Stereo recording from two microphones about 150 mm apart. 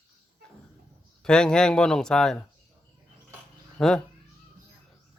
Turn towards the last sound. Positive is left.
turn(degrees=5)  # may be behind; listen again after turning